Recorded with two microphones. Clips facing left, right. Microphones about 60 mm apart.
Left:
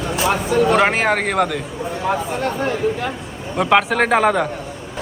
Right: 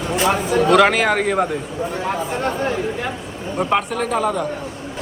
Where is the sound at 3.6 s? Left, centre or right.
Left.